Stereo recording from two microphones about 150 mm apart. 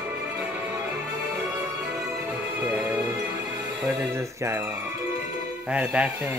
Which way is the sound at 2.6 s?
10° right (ahead or behind).